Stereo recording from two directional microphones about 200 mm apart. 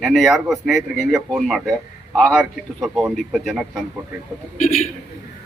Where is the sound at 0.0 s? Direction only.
Centre (ahead or behind).